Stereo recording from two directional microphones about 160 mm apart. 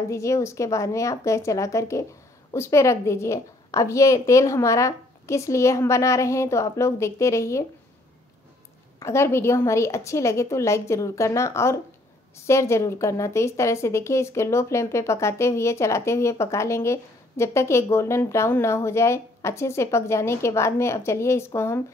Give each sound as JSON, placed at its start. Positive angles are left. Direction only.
{"t": 0.1, "sound": "a woman's voice", "side_deg": 20}
{"t": 9.0, "sound": "a woman's voice", "side_deg": 15}